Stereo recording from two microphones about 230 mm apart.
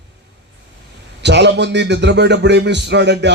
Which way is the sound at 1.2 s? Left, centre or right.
Right.